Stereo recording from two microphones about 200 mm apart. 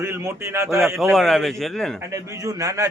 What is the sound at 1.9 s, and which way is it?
Speech, 15° right (ahead or behind).